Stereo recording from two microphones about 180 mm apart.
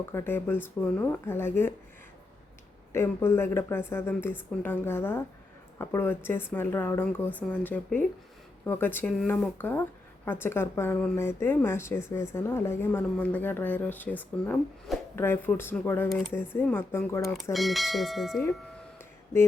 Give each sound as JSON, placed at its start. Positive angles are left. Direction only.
{"t": 0.0, "sound": "a woman's voice", "side_deg": 15}
{"t": 2.9, "sound": "a woman's voice", "side_deg": 15}
{"t": 17.5, "sound": "speech", "side_deg": 0}
{"t": 18.9, "sound": "a sound", "side_deg": 15}